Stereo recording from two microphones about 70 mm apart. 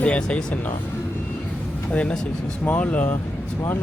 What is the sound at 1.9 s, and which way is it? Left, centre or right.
Speech, centre.